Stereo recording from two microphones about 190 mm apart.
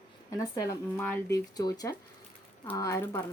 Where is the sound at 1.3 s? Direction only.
20° left (ahead or behind).